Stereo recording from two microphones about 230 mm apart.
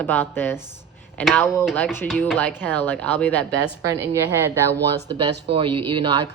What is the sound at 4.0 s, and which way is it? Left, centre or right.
Speech, centre.